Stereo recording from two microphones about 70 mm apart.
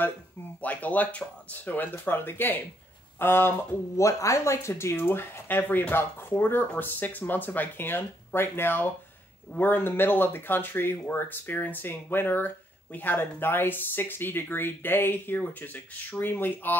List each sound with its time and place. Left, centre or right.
0.6 s speech: left
4.0 s speech: left